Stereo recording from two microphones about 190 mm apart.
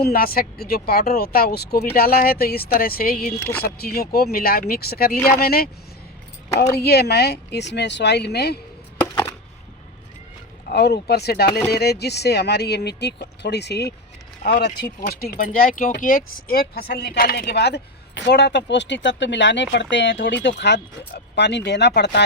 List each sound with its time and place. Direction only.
0.0 s speech: 50° left (ahead or behind)
6.7 s speech: 55° left (ahead or behind)
10.7 s speech: 60° left (ahead or behind)